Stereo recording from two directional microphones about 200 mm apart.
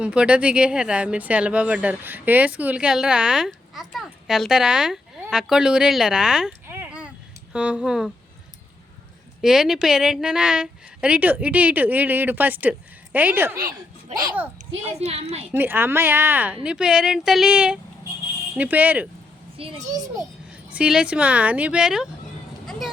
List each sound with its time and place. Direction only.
0.0 s speech: 5° right (ahead or behind)
9.4 s a woman's voice: centre (ahead or behind)
14.9 s a woman's voice: 35° right (ahead or behind)
15.5 s a woman's voice: 10° right (ahead or behind)
19.5 s a child's voice: 30° right (ahead or behind)
20.7 s speech: 5° right (ahead or behind)